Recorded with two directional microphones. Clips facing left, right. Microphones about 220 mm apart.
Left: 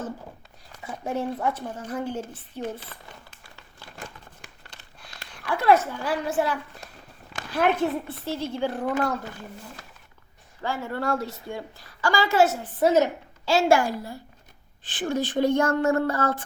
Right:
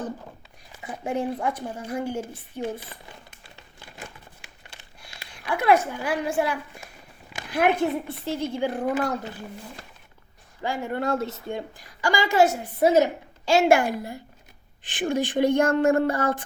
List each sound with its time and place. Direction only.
0.8 s a woman's voice: 15° right (ahead or behind)
3.4 s a sound: 20° right (ahead or behind)
7.3 s a woman's voice: 15° right (ahead or behind)
10.6 s a woman's voice: 15° right (ahead or behind)